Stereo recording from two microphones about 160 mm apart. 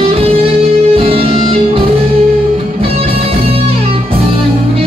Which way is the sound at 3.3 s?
35° right (ahead or behind).